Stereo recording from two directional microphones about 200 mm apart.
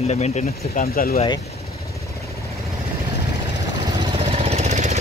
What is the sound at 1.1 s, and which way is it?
Speech, 25° left (ahead or behind).